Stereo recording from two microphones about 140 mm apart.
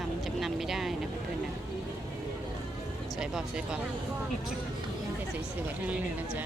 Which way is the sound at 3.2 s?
5° right (ahead or behind).